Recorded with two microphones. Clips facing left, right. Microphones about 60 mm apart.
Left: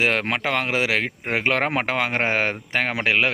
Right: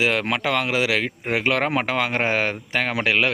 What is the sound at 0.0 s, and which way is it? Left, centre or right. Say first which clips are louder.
Speech: even; left.